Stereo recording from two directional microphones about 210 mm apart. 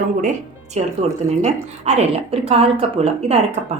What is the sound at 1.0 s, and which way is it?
A woman's voice, 30° right (ahead or behind).